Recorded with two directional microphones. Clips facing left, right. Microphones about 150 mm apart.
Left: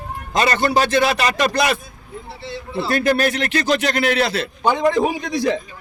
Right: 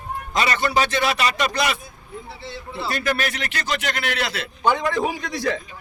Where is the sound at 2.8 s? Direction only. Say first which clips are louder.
Left 7 dB; 50° left (ahead or behind).